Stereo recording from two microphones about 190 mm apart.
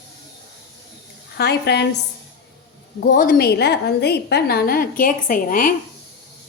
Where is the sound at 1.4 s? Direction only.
60° left (ahead or behind).